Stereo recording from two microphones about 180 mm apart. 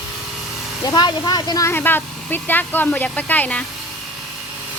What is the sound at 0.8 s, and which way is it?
Speech, 25° left (ahead or behind).